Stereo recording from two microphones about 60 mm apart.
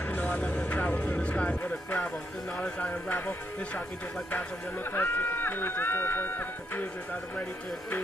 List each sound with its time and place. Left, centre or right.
0.0 s vehicle: left
0.4 s music: left
2.5 s speech: left
3.1 s speech: left
4.9 s speech: left